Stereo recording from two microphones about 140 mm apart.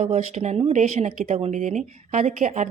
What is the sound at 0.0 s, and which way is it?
A woman's voice, 50° right (ahead or behind).